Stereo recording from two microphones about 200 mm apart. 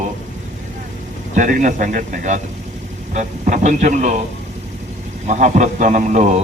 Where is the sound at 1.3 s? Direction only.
40° right (ahead or behind).